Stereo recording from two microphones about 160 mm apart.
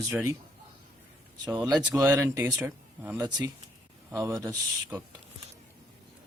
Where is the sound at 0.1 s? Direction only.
20° right (ahead or behind).